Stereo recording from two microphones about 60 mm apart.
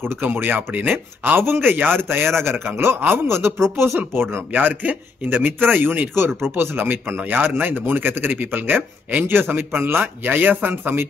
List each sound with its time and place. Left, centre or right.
0.1 s a man's voice: right